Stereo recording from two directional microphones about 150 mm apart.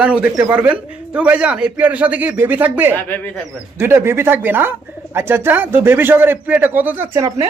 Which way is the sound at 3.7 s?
15° right (ahead or behind).